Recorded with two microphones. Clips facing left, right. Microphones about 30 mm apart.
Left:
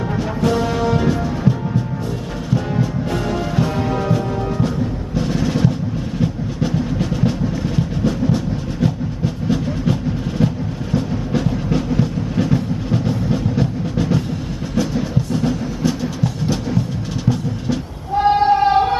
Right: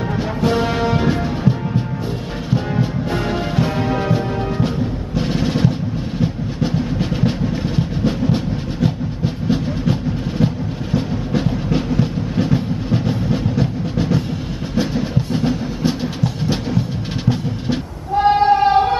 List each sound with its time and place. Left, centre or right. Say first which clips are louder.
0.5 s music: even; right
3.1 s music: even; centre
8.8 s a sound: even; right
11.0 s music: even; centre
12.0 s train: even; centre
15.1 s music: even; right
18.1 s a sound: right 1 dB; centre